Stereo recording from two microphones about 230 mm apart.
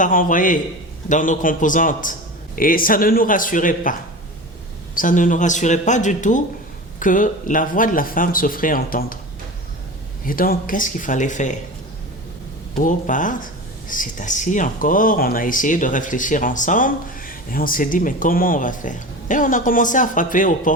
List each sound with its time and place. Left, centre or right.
0.0 s speech: left
4.9 s speech: left
10.2 s speech: left
12.7 s speech: left